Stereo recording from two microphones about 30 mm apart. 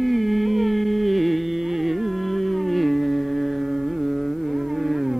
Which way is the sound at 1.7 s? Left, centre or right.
Centre.